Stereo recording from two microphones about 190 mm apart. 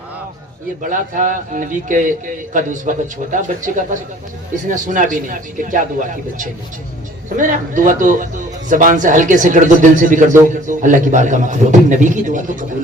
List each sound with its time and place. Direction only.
0.8 s a man's voice: 45° right (ahead or behind)
7.3 s a man's voice: 45° right (ahead or behind)